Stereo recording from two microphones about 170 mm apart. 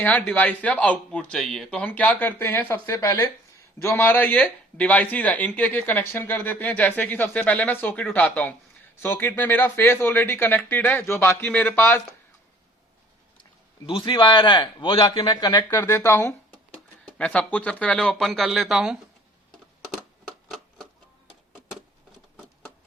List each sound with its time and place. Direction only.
0.0 s speech: 10° left (ahead or behind)
13.8 s speech: 30° left (ahead or behind)
15.8 s speech: 15° left (ahead or behind); by 18.9 s 5° right (ahead or behind)
19.5 s tick-tock: centre (ahead or behind)
21.5 s a sound: 5° right (ahead or behind)